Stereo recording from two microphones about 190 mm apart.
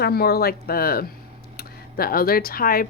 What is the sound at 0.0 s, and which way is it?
A woman's voice, 55° left (ahead or behind).